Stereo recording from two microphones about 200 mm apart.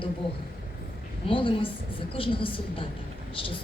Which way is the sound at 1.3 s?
25° left (ahead or behind).